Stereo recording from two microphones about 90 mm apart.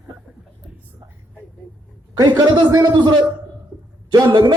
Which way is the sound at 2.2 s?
50° right (ahead or behind).